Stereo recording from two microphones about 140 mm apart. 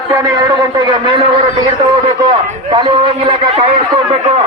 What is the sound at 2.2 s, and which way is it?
A man's voice, 35° right (ahead or behind).